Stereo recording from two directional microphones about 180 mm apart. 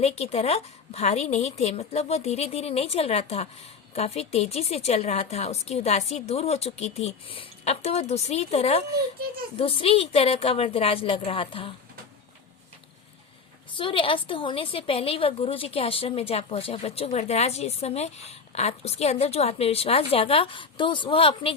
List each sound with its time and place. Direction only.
0.0 s a woman's voice: 35° left (ahead or behind)
13.7 s a woman's voice: 30° left (ahead or behind)